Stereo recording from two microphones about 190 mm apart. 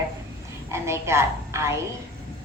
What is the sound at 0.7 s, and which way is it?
A woman's voice, 15° right (ahead or behind).